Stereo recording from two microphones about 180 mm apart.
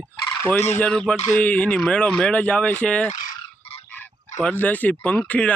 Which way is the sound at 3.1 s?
50° left (ahead or behind).